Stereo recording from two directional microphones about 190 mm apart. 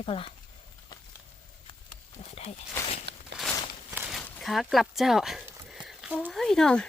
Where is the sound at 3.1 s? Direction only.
60° right (ahead or behind).